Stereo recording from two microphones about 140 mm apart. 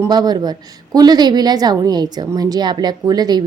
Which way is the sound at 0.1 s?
30° right (ahead or behind).